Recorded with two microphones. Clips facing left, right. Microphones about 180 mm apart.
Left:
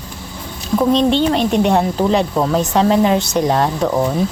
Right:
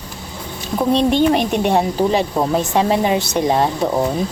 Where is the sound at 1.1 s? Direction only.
15° right (ahead or behind).